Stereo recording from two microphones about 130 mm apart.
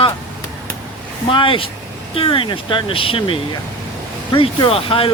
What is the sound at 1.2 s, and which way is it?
Speech, 40° left (ahead or behind).